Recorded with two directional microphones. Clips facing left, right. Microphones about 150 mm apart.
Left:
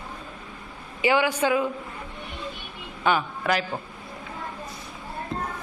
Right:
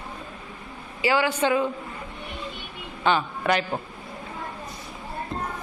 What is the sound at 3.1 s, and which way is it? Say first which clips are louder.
Speech: right 1 dB; 10° left (ahead or behind).